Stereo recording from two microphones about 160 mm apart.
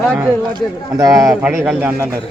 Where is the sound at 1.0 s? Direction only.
20° right (ahead or behind).